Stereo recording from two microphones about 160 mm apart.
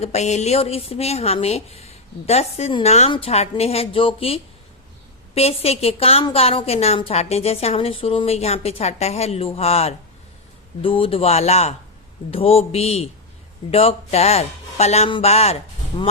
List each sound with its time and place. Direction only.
0.0 s a woman's voice: 45° left (ahead or behind)